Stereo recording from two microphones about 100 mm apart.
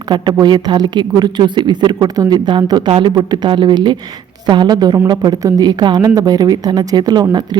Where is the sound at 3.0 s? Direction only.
45° right (ahead or behind).